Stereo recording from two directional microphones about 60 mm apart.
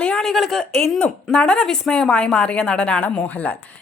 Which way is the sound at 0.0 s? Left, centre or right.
Centre.